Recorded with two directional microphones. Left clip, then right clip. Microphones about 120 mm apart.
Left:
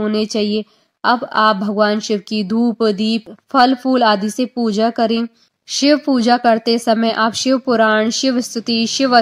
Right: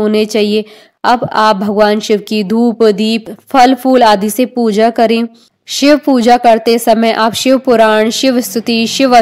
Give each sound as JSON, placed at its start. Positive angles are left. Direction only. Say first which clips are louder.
{"t": 0.0, "sound": "a woman's voice", "louder": "right 7 dB", "side_deg": -45}